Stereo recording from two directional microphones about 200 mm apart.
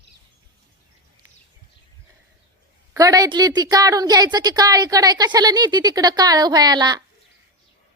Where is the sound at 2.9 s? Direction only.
15° right (ahead or behind).